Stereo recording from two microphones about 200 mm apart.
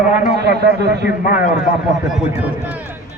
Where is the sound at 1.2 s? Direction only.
45° left (ahead or behind).